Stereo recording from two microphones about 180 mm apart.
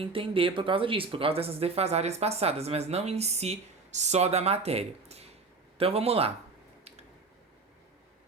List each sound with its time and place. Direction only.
0.0 s speech: 30° right (ahead or behind)